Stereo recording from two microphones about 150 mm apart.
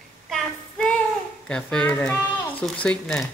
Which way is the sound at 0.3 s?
5° left (ahead or behind).